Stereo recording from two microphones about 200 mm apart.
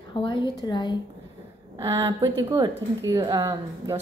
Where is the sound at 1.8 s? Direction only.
15° right (ahead or behind).